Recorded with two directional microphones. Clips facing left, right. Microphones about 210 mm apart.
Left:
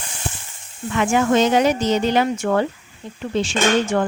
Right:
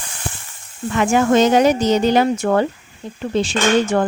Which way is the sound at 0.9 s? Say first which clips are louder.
Right 2 dB; 40° right (ahead or behind).